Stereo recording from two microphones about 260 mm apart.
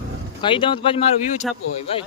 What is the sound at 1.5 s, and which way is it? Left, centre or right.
Speech, centre.